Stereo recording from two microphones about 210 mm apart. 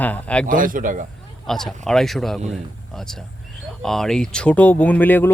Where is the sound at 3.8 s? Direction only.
Centre (ahead or behind).